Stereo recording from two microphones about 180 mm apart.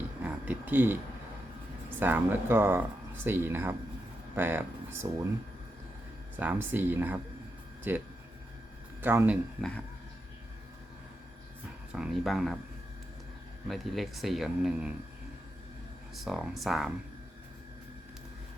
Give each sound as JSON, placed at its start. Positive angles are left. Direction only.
{"t": 0.2, "sound": "a sound", "side_deg": -10}
{"t": 2.0, "sound": "speech", "side_deg": -10}
{"t": 6.3, "sound": "speech", "side_deg": -10}
{"t": 11.9, "sound": "speech", "side_deg": 0}
{"t": 13.7, "sound": "speech", "side_deg": 0}
{"t": 16.1, "sound": "speech", "side_deg": 0}